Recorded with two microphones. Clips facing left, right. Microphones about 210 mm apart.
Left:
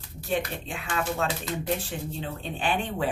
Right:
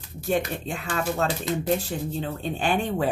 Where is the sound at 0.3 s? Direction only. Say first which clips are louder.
Right 4 dB; 40° right (ahead or behind).